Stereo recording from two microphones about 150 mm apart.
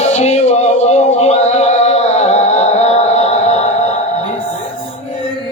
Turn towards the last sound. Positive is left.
turn(degrees=50)  # may be behind; listen again after turning